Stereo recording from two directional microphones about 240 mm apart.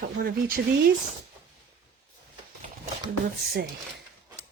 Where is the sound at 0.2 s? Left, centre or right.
Right.